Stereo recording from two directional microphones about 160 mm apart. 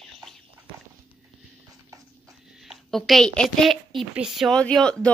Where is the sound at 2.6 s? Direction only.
Centre (ahead or behind).